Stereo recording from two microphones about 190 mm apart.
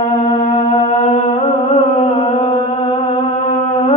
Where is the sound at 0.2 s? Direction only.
35° left (ahead or behind).